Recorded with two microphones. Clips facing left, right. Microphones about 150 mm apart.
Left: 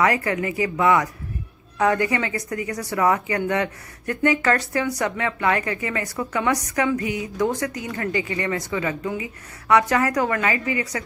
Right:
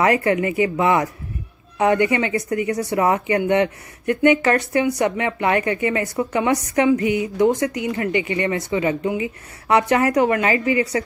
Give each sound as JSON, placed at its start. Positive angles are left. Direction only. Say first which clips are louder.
{"t": 0.0, "sound": "speech", "louder": "right 4 dB", "side_deg": -25}